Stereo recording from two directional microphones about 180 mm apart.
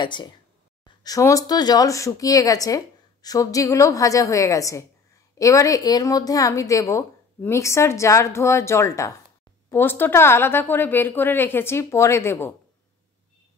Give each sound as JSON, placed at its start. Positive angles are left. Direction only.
{"t": 0.0, "sound": "a woman's voice", "side_deg": 25}